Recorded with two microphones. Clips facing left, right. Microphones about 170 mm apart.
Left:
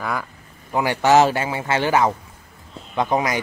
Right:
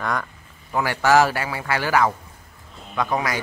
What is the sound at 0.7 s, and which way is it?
A man's voice, 20° left (ahead or behind).